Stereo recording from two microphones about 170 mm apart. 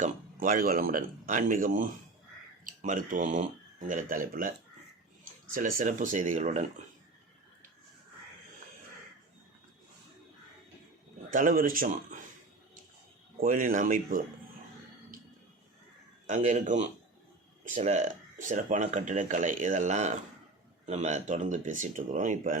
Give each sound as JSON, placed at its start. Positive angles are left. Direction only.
{"t": 0.0, "sound": "speech", "side_deg": -55}
{"t": 5.5, "sound": "speech", "side_deg": -50}
{"t": 11.3, "sound": "a man's voice", "side_deg": -55}
{"t": 13.4, "sound": "speech", "side_deg": -50}
{"t": 16.2, "sound": "speech", "side_deg": -45}